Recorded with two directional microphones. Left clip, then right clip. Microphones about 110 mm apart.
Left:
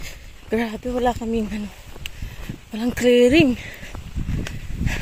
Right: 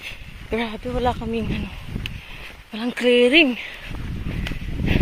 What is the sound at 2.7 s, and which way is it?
Speech, 70° left (ahead or behind).